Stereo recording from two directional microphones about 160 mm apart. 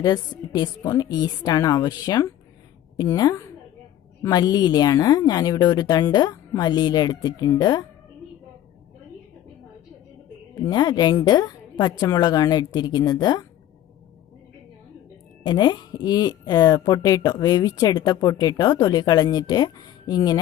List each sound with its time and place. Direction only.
0.0 s speech: 25° left (ahead or behind)
10.7 s speech: 25° left (ahead or behind)
15.4 s speech: 30° left (ahead or behind)